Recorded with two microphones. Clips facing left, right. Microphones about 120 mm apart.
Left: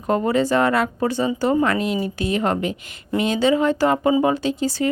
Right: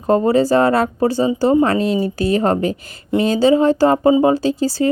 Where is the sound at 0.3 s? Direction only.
35° right (ahead or behind).